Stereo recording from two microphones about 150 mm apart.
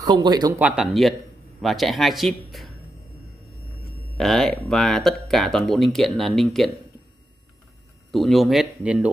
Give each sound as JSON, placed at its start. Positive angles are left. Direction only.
{"t": 0.0, "sound": "speech", "side_deg": -30}
{"t": 0.6, "sound": "speech", "side_deg": -5}
{"t": 4.2, "sound": "speech", "side_deg": 5}
{"t": 8.1, "sound": "speech", "side_deg": 0}